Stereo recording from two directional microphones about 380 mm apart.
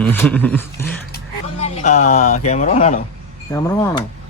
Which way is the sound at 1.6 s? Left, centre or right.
Centre.